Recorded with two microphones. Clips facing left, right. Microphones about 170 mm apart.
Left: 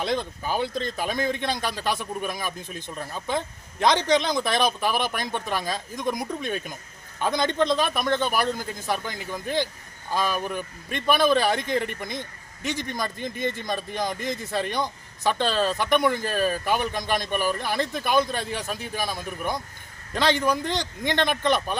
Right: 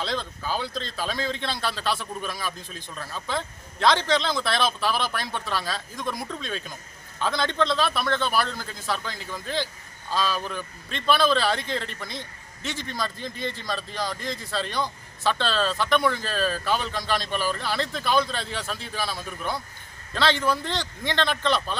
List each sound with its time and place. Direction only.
0.0 s a man's voice: 20° left (ahead or behind)